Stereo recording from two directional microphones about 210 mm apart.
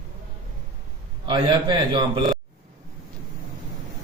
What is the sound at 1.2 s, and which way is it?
A man's voice, 20° right (ahead or behind).